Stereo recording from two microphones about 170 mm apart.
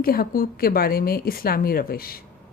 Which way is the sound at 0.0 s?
60° left (ahead or behind).